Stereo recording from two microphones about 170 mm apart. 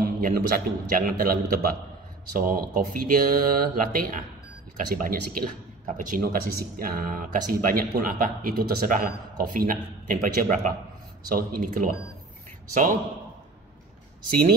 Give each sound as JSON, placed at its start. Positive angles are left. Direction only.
{"t": 0.0, "sound": "speech", "side_deg": -55}